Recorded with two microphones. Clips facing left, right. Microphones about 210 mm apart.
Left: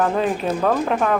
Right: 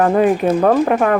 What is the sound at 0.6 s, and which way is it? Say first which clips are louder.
Speech: right 5 dB; 40° right (ahead or behind).